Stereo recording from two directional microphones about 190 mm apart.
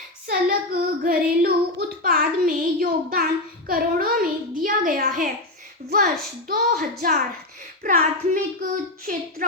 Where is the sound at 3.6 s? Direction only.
50° right (ahead or behind).